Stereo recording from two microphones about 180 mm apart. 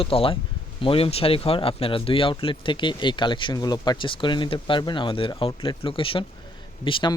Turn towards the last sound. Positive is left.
turn(degrees=25)  # may be behind; listen again after turning